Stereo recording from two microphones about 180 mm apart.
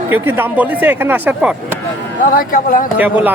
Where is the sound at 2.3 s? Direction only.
50° left (ahead or behind).